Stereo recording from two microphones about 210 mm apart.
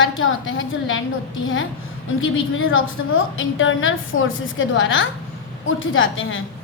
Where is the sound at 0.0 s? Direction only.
70° left (ahead or behind).